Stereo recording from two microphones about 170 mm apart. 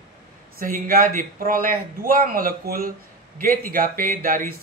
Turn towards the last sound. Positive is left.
turn(degrees=-55)  # may be behind; listen again after turning